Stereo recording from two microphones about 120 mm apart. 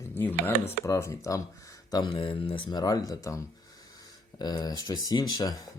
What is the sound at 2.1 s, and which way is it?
Speech, 45° left (ahead or behind).